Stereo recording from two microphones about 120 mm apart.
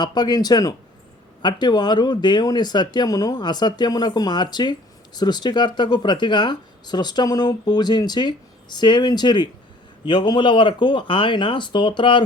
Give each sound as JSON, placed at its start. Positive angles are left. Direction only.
{"t": 0.0, "sound": "speech", "side_deg": 35}